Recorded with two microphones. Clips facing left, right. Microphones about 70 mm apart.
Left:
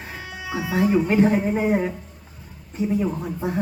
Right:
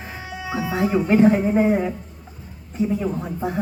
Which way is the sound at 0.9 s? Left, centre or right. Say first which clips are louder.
Right 3 dB; centre.